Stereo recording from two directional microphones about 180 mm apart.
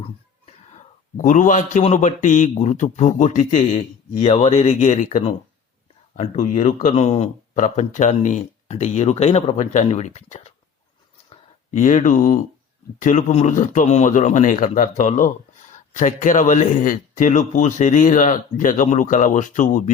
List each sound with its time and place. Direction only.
0.4 s a man's voice: 40° left (ahead or behind)
11.7 s speech: 45° left (ahead or behind)